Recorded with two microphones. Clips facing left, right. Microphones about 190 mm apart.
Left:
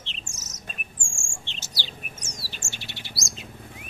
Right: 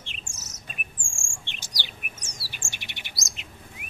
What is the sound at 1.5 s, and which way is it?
Bird, 15° right (ahead or behind).